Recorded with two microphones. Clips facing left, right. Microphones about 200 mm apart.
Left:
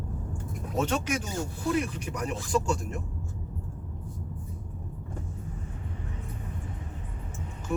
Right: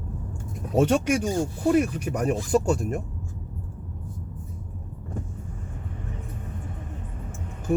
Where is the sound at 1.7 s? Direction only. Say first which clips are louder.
Right 6 dB; 50° right (ahead or behind).